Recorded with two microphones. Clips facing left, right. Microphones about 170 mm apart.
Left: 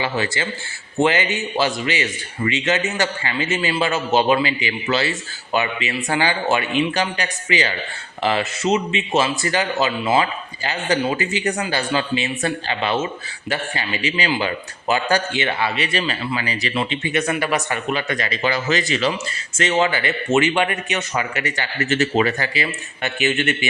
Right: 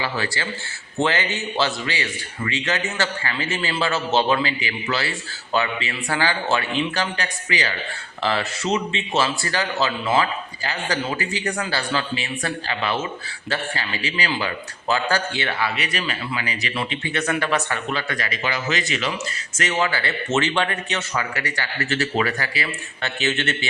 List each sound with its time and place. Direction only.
0.0 s a man's voice: 20° left (ahead or behind)